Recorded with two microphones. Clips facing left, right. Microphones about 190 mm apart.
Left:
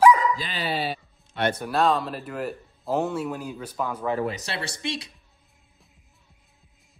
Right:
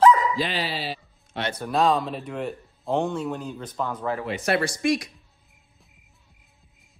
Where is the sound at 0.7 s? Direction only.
55° left (ahead or behind).